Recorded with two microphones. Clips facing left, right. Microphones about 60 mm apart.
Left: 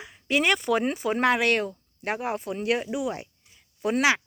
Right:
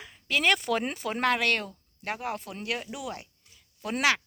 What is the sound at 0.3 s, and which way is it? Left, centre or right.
Speech, centre.